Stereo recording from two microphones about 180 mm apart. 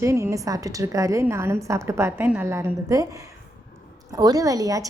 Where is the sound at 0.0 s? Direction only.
15° right (ahead or behind).